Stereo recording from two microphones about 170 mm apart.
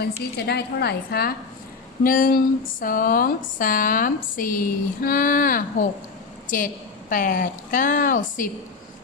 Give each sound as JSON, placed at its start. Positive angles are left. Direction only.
{"t": 0.0, "sound": "a woman's voice", "side_deg": 70}
{"t": 7.1, "sound": "a woman's voice", "side_deg": 50}